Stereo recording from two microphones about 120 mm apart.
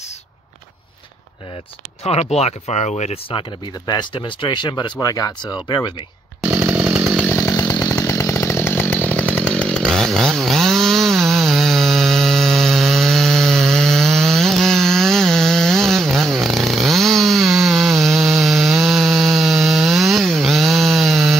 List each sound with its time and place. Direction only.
2.0 s speech: 60° left (ahead or behind)
3.8 s speech: 35° left (ahead or behind)
6.4 s chainsaw: 20° right (ahead or behind)
7.2 s chainsaw: 25° left (ahead or behind); by 21.4 s centre (ahead or behind)